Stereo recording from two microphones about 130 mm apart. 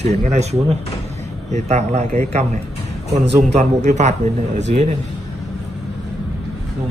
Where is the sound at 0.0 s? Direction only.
55° right (ahead or behind).